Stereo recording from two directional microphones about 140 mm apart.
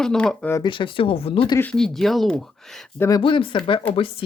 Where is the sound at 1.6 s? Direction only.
5° left (ahead or behind).